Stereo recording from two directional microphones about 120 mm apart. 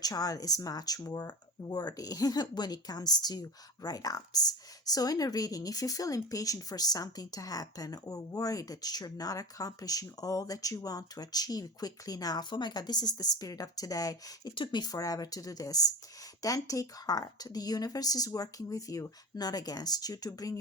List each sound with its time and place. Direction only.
0.0 s speech: 30° left (ahead or behind)